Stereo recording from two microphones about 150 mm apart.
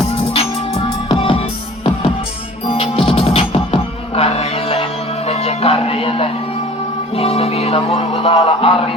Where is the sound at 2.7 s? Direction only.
40° left (ahead or behind).